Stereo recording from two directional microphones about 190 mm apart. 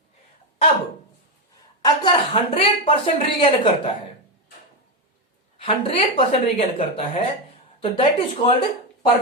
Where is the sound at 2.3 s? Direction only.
30° left (ahead or behind).